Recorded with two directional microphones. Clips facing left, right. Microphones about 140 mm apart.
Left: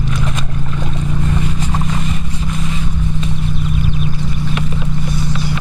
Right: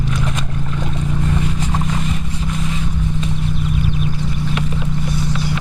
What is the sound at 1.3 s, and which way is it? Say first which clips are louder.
Boat: left 1 dB; 30° left (ahead or behind).